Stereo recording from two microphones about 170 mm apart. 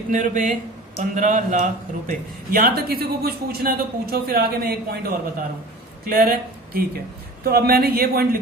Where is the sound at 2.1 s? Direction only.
60° right (ahead or behind).